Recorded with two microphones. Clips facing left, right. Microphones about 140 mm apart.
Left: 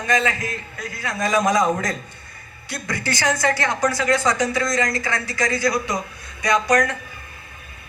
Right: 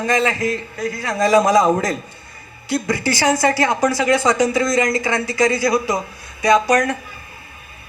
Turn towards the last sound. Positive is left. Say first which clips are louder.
# right 4 dB
turn(degrees=-25)  # may be behind; listen again after turning